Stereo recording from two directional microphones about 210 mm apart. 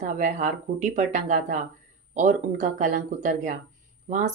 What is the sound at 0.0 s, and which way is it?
Speech, 35° right (ahead or behind).